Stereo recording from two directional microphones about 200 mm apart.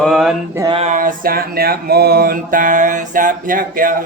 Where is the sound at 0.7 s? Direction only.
40° right (ahead or behind).